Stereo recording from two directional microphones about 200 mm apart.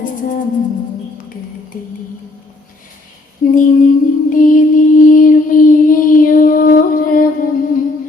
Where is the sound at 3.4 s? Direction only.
40° left (ahead or behind).